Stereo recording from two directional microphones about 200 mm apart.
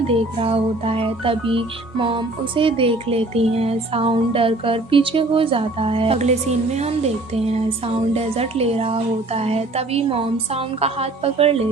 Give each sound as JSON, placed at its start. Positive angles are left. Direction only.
{"t": 0.1, "sound": "speech", "side_deg": -30}